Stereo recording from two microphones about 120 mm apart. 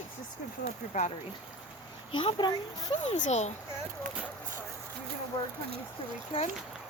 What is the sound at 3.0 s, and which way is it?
Speech, 80° left.